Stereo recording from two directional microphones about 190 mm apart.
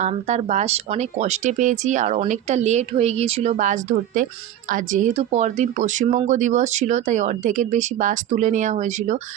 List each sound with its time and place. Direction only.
0.0 s speech: 35° right (ahead or behind)